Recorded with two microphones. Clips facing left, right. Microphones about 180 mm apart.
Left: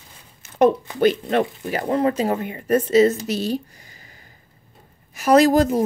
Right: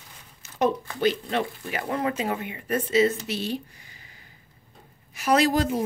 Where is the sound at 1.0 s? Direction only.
50° left (ahead or behind).